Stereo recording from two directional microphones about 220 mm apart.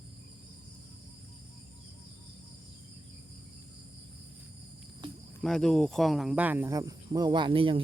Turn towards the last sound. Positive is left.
turn(degrees=-25)  # may be behind; listen again after turning